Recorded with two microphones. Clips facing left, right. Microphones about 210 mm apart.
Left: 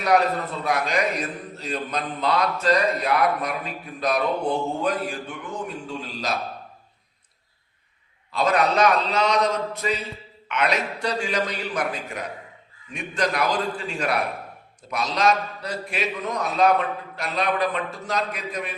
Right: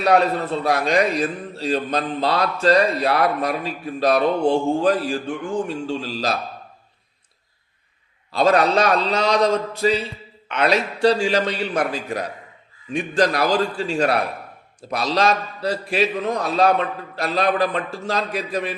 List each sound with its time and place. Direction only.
0.0 s a man's voice: 30° right (ahead or behind)
8.3 s a man's voice: 30° right (ahead or behind)